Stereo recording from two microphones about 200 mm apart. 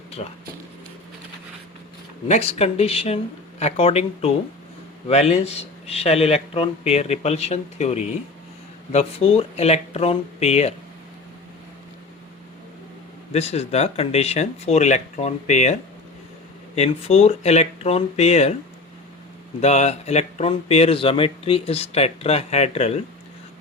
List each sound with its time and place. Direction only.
2.2 s speech: 35° left (ahead or behind)
13.3 s speech: 30° left (ahead or behind)
19.6 s speech: 30° left (ahead or behind)